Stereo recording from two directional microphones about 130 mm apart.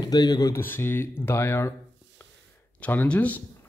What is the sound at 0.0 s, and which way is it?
Speech, 30° left (ahead or behind).